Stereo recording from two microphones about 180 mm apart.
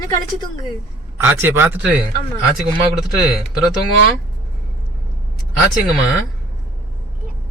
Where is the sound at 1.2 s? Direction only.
10° right (ahead or behind).